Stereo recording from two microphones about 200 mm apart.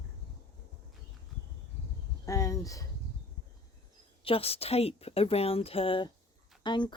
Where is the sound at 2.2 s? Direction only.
15° left (ahead or behind).